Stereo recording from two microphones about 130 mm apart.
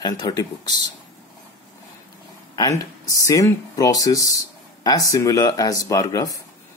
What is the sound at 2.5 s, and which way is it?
Speech, 25° left (ahead or behind).